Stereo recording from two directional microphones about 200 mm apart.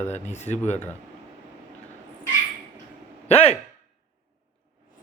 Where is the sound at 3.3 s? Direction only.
30° left (ahead or behind).